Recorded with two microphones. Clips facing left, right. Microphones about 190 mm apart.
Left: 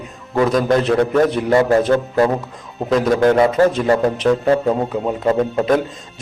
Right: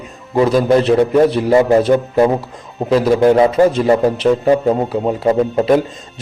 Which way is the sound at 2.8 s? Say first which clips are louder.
Right 3 dB; 5° right (ahead or behind).